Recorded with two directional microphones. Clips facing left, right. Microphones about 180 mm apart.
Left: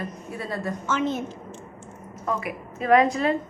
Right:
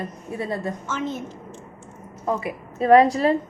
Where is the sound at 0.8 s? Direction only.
70° left (ahead or behind).